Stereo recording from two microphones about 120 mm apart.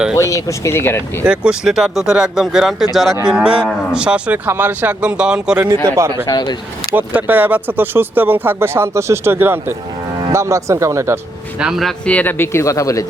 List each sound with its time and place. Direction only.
0.2 s speech: 25° left (ahead or behind)
1.2 s speech: 5° right (ahead or behind)
5.6 s speech: 25° right (ahead or behind)
6.2 s speech: 35° left (ahead or behind)
6.9 s speech: 15° right (ahead or behind)
11.6 s speech: centre (ahead or behind)
12.0 s speech: 15° left (ahead or behind)